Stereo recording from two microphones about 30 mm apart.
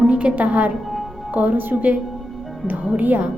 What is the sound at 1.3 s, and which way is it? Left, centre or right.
Speech, right.